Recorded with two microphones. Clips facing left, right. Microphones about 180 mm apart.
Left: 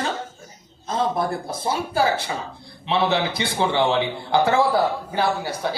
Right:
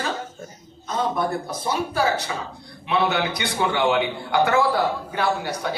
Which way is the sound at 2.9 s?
30° left (ahead or behind).